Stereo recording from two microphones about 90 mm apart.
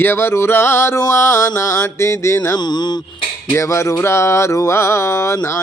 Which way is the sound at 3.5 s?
30° left (ahead or behind).